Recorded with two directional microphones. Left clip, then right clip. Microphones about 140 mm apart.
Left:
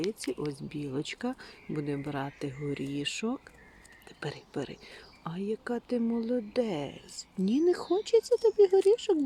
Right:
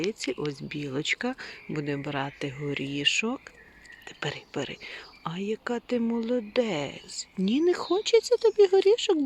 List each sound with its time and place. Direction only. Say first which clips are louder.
0.5 s speech: right 3 dB; 10° right (ahead or behind)